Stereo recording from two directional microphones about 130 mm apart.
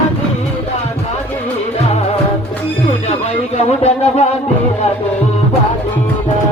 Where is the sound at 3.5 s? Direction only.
55° left (ahead or behind).